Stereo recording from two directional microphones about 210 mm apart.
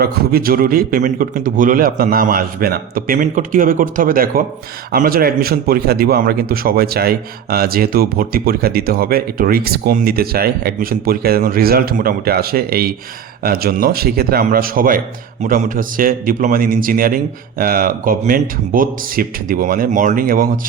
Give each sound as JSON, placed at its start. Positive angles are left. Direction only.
{"t": 0.0, "sound": "a man's voice", "side_deg": -45}